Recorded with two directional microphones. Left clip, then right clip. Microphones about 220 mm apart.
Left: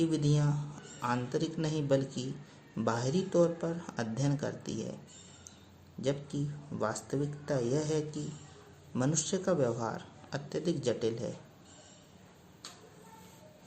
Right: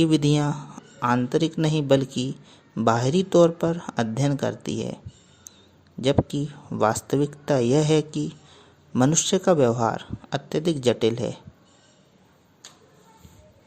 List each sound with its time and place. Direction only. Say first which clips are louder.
0.0 s a man's voice: right 11 dB; 40° right (ahead or behind)
6.0 s a man's voice: right 12 dB; 40° right (ahead or behind)